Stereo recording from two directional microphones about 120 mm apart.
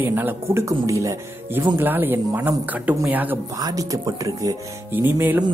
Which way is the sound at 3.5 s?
30° right (ahead or behind).